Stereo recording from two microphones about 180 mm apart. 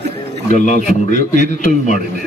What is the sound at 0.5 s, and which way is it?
A man's voice, 40° left (ahead or behind).